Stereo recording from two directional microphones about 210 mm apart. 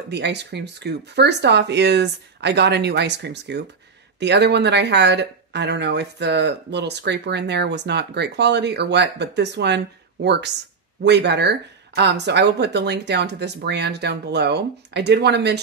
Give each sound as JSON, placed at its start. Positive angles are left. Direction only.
{"t": 0.1, "sound": "speech", "side_deg": -55}